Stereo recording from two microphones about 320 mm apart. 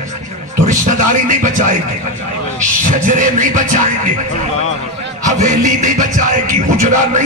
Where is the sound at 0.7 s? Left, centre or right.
Right.